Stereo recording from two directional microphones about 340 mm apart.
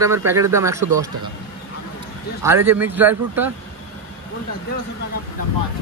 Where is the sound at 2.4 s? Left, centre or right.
Centre.